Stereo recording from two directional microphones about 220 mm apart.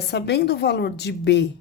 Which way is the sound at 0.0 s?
50° left (ahead or behind).